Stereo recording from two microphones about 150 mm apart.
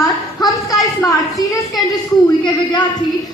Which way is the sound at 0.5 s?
25° left (ahead or behind).